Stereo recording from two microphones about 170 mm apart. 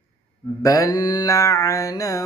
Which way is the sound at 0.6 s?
20° left (ahead or behind).